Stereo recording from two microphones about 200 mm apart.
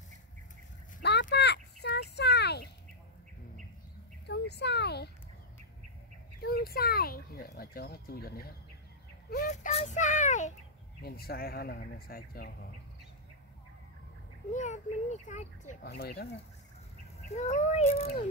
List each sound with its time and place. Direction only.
1.3 s a sound: 55° left (ahead or behind)
4.3 s a sound: 55° left (ahead or behind)
6.4 s a child's voice: 50° left (ahead or behind)
11.0 s speech: 50° left (ahead or behind)
14.5 s a child's voice: 35° left (ahead or behind)
15.8 s speech: 50° left (ahead or behind)
17.3 s a child's voice: 35° left (ahead or behind)